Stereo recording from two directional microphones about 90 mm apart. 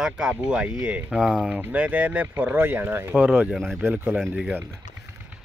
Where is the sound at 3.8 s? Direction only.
20° right (ahead or behind).